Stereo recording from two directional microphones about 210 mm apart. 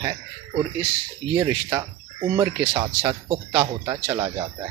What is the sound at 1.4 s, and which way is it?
Speech, 15° right (ahead or behind).